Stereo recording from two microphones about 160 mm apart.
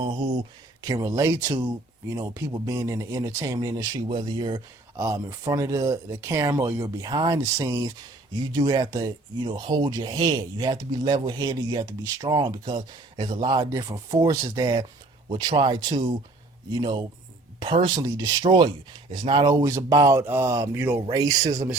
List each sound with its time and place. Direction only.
0.0 s speech: 30° right (ahead or behind)